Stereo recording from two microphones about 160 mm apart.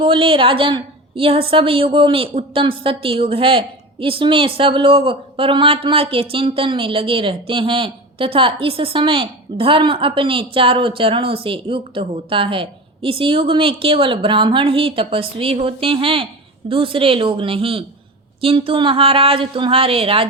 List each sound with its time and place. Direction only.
0.0 s a woman's voice: 35° right (ahead or behind)